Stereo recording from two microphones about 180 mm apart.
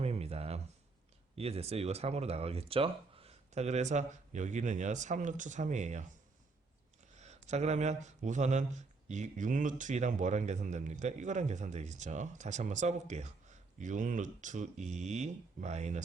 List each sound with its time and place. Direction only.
0.0 s a sound: 35° right (ahead or behind)
1.4 s speech: 35° right (ahead or behind)
7.2 s speech: 40° right (ahead or behind)